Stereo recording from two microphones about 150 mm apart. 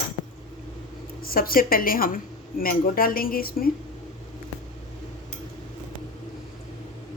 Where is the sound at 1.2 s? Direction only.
75° left (ahead or behind).